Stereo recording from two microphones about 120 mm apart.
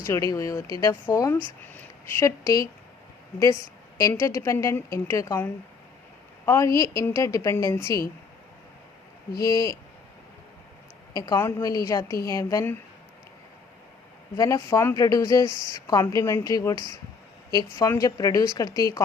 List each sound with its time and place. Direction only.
0.0 s a woman's voice: 30° left (ahead or behind)
9.5 s speech: 30° left (ahead or behind)
11.1 s a woman's voice: 35° left (ahead or behind)
14.3 s speech: 25° left (ahead or behind)
15.4 s speech: 35° right (ahead or behind)
15.7 s speech: 30° left (ahead or behind)